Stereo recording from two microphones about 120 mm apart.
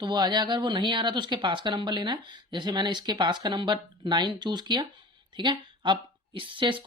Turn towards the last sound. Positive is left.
turn(degrees=-45)  # may be behind; listen again after turning